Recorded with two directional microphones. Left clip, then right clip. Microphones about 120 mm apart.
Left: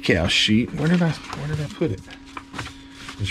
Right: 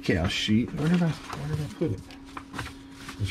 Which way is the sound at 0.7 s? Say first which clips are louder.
Left 6 dB; 5° right (ahead or behind).